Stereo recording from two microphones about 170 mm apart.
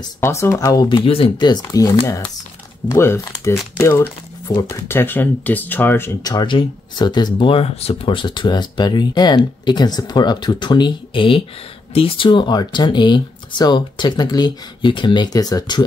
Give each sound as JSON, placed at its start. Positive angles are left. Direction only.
{"t": 0.2, "sound": "speech", "side_deg": 15}